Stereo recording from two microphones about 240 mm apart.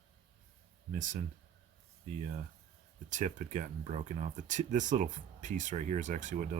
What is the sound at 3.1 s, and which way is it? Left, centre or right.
Speech, right.